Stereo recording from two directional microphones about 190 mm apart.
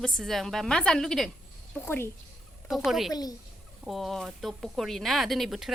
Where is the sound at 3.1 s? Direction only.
20° left (ahead or behind).